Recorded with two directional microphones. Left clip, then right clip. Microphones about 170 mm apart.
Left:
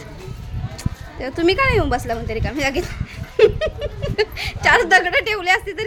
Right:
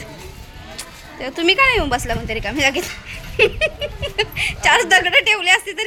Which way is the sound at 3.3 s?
25° left (ahead or behind).